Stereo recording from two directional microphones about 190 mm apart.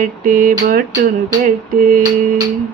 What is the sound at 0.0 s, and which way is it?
Music, 45° right (ahead or behind).